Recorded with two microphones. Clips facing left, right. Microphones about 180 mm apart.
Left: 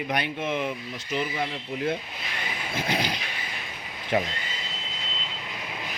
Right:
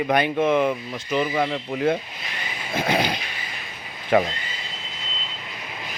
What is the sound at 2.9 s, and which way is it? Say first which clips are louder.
Speech: right 6 dB; 60° right (ahead or behind).